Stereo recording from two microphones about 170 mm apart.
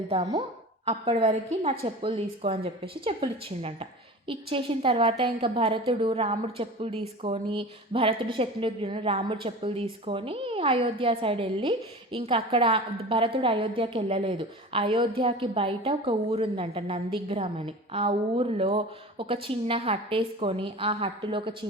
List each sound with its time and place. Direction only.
0.9 s a woman's voice: 35° right (ahead or behind)